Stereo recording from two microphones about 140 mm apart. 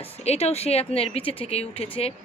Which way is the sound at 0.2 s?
50° left (ahead or behind).